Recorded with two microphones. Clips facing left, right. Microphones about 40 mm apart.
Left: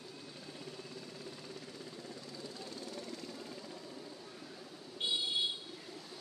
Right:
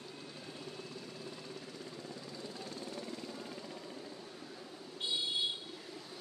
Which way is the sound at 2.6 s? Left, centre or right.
Right.